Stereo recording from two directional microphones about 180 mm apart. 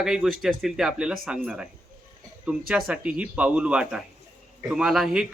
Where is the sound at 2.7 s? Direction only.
5° right (ahead or behind).